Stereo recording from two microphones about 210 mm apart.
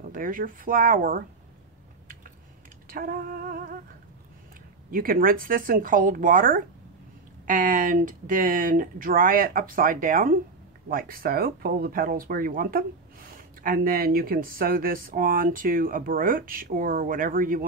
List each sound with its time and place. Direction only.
0.1 s speech: 40° right (ahead or behind)
2.9 s speech: 45° right (ahead or behind)
4.9 s speech: 45° right (ahead or behind)